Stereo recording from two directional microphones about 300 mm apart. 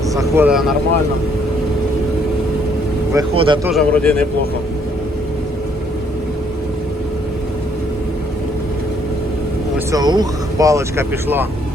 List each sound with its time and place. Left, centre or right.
0.1 s speech: centre
3.1 s speech: centre
3.7 s speech: centre
9.7 s speech: centre